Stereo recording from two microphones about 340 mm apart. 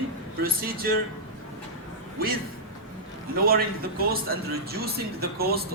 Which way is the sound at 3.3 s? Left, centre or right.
Right.